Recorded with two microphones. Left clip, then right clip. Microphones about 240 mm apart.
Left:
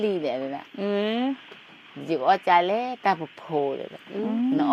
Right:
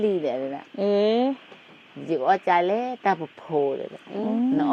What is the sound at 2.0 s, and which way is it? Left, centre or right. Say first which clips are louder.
A woman's voice: even; left.